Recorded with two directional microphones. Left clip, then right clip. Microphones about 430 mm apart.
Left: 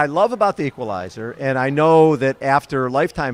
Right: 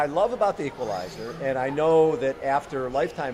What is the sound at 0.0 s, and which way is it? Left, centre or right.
A man's voice, left.